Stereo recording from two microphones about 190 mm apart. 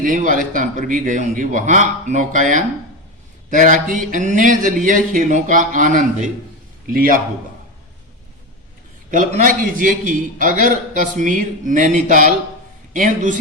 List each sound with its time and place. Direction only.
0.0 s a man's voice: 45° right (ahead or behind)
9.0 s a man's voice: 45° right (ahead or behind)